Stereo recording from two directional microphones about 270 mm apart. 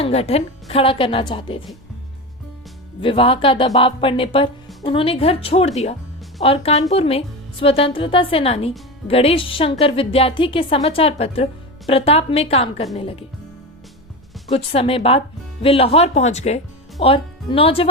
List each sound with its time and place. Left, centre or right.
0.0 s speech: left
3.0 s speech: centre
14.5 s speech: left